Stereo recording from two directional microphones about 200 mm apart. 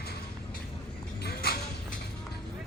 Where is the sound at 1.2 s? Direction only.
50° left (ahead or behind).